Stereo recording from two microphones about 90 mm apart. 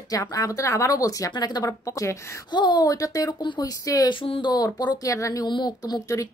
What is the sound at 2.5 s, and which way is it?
Speech, 55° left (ahead or behind).